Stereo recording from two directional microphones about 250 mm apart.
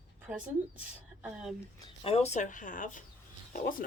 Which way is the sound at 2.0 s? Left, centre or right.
Left.